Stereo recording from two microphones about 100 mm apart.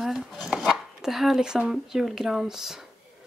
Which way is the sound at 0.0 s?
Centre (ahead or behind).